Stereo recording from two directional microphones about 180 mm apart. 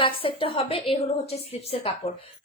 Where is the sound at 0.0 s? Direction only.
30° left (ahead or behind).